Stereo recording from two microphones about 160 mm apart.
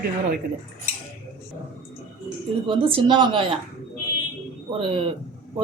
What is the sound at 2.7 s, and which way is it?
Speech, 35° right (ahead or behind).